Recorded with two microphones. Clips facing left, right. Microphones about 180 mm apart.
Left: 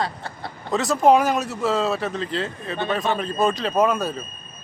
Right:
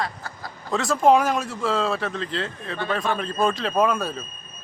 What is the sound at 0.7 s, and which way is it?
Speech, centre (ahead or behind).